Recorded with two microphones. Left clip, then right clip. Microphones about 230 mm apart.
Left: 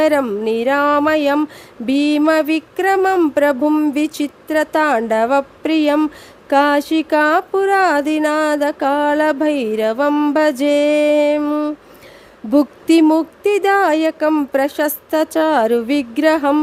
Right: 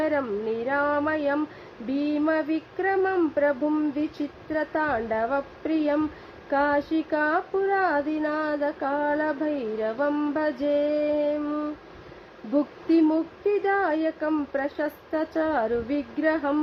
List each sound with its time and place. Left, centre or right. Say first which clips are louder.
0.0 s speech: left 11 dB; left